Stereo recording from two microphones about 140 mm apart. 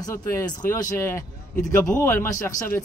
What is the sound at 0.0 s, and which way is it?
A woman's voice, 25° left (ahead or behind).